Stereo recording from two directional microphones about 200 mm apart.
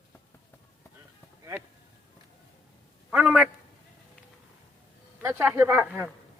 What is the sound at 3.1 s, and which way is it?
Speech, 5° right (ahead or behind).